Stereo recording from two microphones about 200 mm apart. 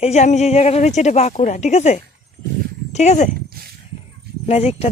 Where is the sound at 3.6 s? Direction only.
50° right (ahead or behind).